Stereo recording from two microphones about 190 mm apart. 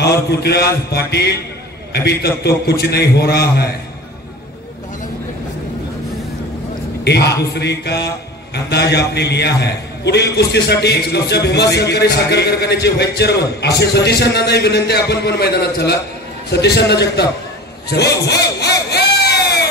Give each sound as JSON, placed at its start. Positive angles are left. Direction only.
{"t": 0.0, "sound": "a man's voice", "side_deg": 60}
{"t": 7.1, "sound": "a man's voice", "side_deg": 60}
{"t": 17.9, "sound": "crowd", "side_deg": 60}